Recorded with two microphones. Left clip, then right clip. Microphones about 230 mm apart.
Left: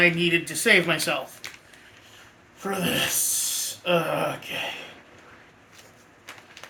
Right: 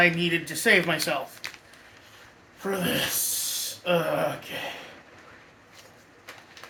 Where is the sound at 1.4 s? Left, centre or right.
Right.